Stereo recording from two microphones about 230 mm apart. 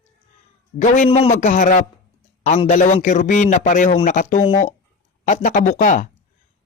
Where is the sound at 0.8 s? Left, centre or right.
Left.